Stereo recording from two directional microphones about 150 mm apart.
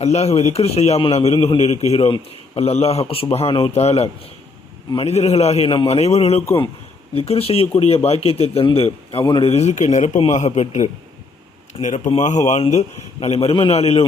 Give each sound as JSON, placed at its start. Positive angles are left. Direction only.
{"t": 0.0, "sound": "a man's voice", "side_deg": 45}